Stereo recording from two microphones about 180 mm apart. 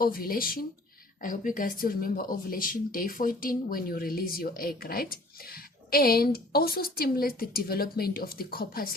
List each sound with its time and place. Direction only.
0.0 s speech: 55° left (ahead or behind)